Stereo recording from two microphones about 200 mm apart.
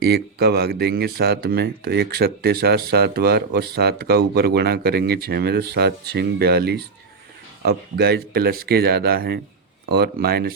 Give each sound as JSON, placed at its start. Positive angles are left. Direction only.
{"t": 0.0, "sound": "speech", "side_deg": -55}